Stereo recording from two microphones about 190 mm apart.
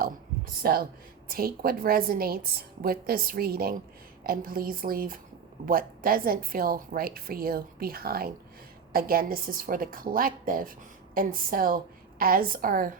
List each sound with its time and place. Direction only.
0.6 s a woman's voice: 50° right (ahead or behind)